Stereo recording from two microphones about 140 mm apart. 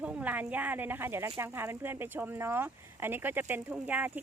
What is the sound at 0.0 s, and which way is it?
Speech, 10° right (ahead or behind).